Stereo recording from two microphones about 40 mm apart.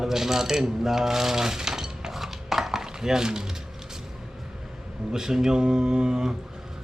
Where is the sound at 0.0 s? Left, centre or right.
Centre.